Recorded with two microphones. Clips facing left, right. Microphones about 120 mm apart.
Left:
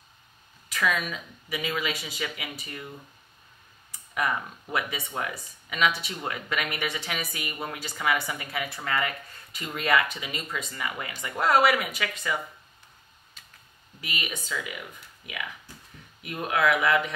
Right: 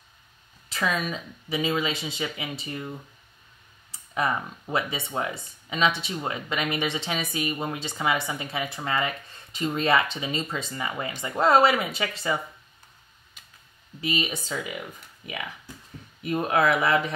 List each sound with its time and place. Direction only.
0.7 s speech: 30° right (ahead or behind)
3.9 s speech: 30° right (ahead or behind)
14.0 s speech: 30° right (ahead or behind)
16.2 s speech: 35° right (ahead or behind)